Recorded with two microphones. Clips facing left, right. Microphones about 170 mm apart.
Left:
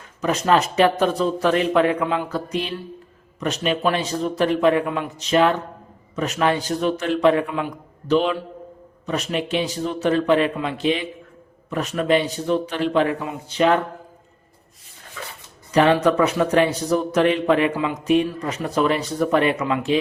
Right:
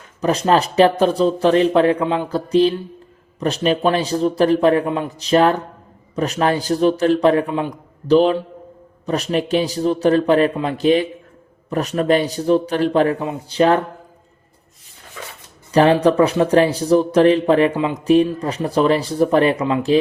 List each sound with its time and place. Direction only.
0.2 s a man's voice: 35° right (ahead or behind)
13.1 s speech: 25° right (ahead or behind)
15.7 s a man's voice: 35° right (ahead or behind)